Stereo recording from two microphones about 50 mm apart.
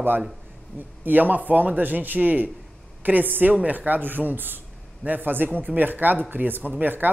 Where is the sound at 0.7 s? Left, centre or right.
Right.